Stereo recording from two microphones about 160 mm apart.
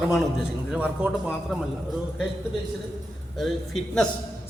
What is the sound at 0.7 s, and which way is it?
Speech, 5° right (ahead or behind).